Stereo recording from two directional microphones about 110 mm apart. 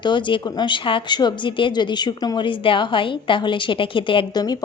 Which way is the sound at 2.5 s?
55° left (ahead or behind).